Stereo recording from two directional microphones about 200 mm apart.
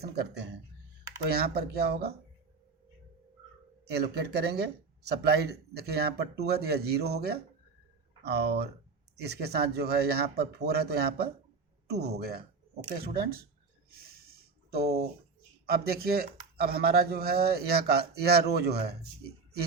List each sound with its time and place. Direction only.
0.0 s speech: 55° right (ahead or behind)
3.8 s speech: 55° right (ahead or behind)
14.7 s speech: 50° right (ahead or behind)